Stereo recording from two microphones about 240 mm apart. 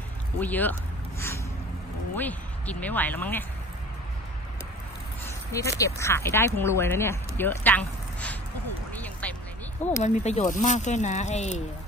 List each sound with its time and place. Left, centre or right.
0.4 s speech: centre
2.1 s speech: centre
5.2 s speech: centre
8.9 s quack: centre
9.8 s speech: centre
10.0 s speech: left